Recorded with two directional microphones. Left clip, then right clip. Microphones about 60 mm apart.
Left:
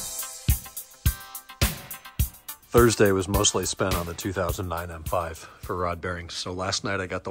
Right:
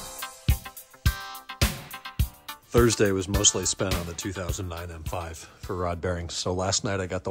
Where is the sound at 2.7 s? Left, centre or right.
Centre.